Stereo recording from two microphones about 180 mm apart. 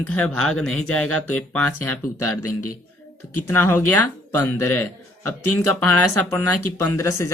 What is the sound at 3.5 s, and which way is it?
Speech, 10° left (ahead or behind).